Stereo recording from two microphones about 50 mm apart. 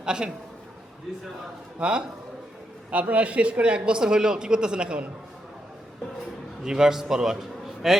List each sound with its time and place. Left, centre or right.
0.0 s a man's voice: centre
1.8 s a man's voice: centre
2.9 s a man's voice: right
6.6 s a man's voice: centre